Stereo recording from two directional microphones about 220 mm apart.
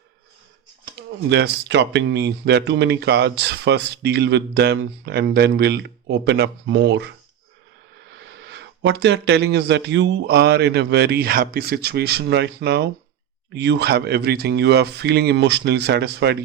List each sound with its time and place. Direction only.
0.9 s speech: 50° right (ahead or behind)
8.1 s speech: 50° right (ahead or behind)